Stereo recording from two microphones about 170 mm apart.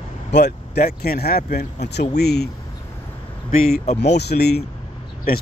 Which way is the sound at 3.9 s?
85° left.